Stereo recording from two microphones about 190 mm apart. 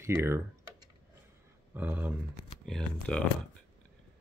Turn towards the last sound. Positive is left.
turn(degrees=0)  # may be behind; listen again after turning